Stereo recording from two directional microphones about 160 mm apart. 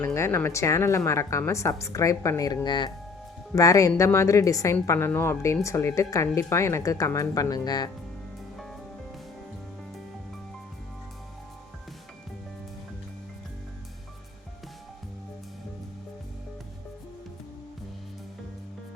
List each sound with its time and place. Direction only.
0.0 s a woman's voice: 15° left (ahead or behind)